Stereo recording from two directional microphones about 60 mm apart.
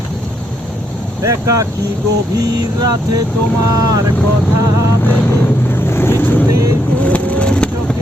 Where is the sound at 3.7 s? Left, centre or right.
Right.